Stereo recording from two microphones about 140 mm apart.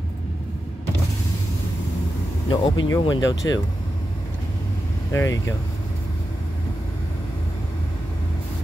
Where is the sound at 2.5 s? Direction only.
30° left (ahead or behind).